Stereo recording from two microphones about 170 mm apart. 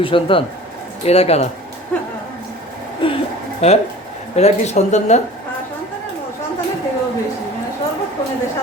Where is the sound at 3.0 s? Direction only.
30° left (ahead or behind).